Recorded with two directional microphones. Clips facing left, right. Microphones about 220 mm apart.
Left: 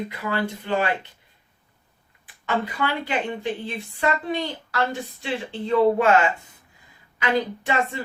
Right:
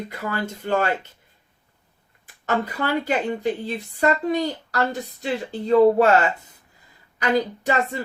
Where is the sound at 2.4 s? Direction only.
40° right (ahead or behind).